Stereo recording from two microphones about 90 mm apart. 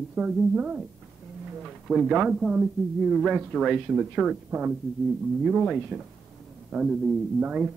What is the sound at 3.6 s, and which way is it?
Speech, centre (ahead or behind).